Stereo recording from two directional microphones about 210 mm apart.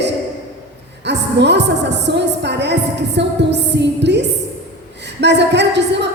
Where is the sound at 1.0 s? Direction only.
55° right (ahead or behind).